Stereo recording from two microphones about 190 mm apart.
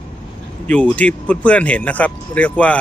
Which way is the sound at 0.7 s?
5° left (ahead or behind).